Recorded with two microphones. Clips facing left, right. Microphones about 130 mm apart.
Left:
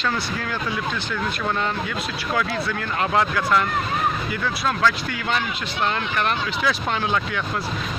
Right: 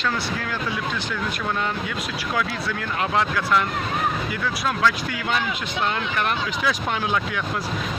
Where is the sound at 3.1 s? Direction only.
Centre (ahead or behind).